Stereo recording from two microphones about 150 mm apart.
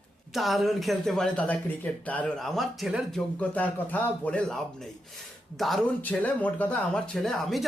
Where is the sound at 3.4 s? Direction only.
10° left (ahead or behind).